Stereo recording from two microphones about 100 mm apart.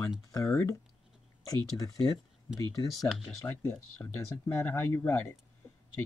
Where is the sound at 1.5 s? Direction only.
35° left (ahead or behind).